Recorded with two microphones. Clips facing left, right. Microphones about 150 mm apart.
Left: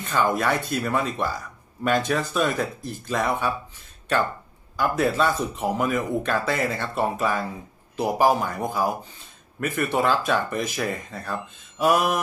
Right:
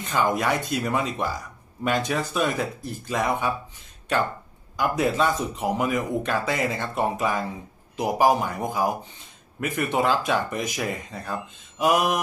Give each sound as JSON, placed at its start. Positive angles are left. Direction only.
{"t": 0.0, "sound": "speech", "side_deg": -15}
{"t": 4.7, "sound": "speech", "side_deg": -15}